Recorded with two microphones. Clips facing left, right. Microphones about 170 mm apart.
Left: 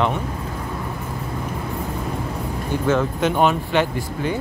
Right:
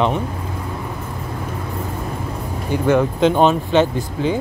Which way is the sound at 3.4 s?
25° right (ahead or behind).